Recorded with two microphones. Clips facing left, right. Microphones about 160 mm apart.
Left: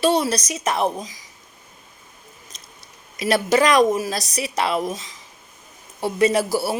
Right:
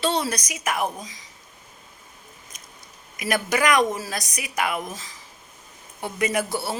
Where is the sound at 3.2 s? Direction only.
25° left (ahead or behind).